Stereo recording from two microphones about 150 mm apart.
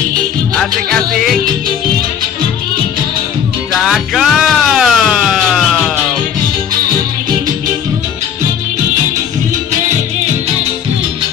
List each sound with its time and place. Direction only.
0.6 s music: centre (ahead or behind)
3.8 s music: centre (ahead or behind)